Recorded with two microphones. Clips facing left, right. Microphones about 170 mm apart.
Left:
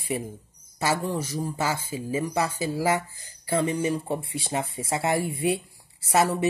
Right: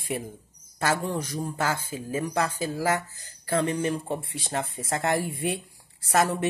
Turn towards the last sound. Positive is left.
turn(degrees=10)  # may be behind; listen again after turning